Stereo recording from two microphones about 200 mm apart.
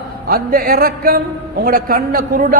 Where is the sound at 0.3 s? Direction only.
45° right (ahead or behind).